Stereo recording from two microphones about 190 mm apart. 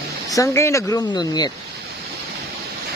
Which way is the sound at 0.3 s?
15° left (ahead or behind).